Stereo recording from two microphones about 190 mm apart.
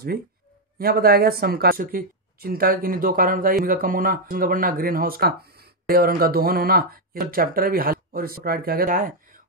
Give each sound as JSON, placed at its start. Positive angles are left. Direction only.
{"t": 0.7, "sound": "speech", "side_deg": -50}